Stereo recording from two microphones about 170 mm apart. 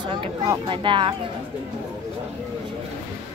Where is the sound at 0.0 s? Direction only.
30° right (ahead or behind).